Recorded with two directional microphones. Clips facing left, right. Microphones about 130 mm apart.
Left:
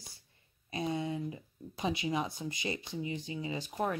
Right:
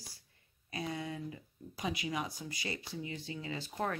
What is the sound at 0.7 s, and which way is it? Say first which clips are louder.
Speech: left 5 dB; 25° left (ahead or behind).